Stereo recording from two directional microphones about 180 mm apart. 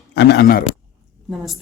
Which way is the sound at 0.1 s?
70° left (ahead or behind).